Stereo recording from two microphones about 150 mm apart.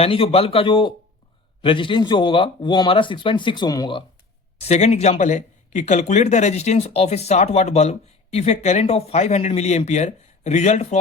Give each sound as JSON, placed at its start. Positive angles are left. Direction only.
{"t": 0.0, "sound": "speech", "side_deg": 40}
{"t": 4.6, "sound": "speech", "side_deg": 50}